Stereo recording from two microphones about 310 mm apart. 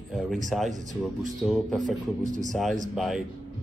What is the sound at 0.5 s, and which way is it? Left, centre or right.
Speech, centre.